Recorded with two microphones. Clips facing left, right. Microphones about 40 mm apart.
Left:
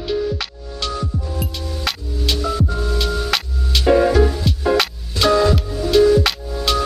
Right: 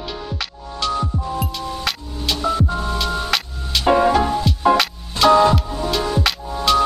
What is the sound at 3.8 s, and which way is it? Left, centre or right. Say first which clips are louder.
Music: left 1 dB; centre.